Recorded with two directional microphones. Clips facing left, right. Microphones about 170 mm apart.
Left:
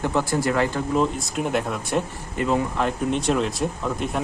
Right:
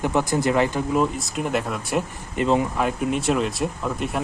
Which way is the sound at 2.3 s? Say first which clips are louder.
Right 2 dB; 20° right (ahead or behind).